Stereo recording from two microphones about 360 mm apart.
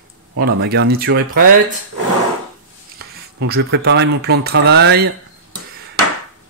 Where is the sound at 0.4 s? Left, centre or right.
Right.